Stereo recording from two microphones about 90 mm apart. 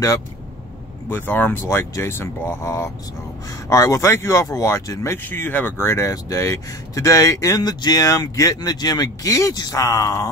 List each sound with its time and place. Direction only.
1.1 s speech: 20° left (ahead or behind)
5.2 s speech: 20° left (ahead or behind); by 10.3 s 35° left (ahead or behind)